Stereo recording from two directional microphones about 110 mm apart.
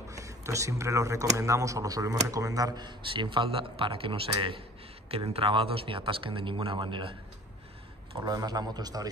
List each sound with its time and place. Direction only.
0.1 s speech: 30° right (ahead or behind); by 4.6 s 50° right (ahead or behind)
5.1 s speech: 65° right (ahead or behind); by 7.2 s 50° right (ahead or behind)
8.2 s speech: 35° right (ahead or behind)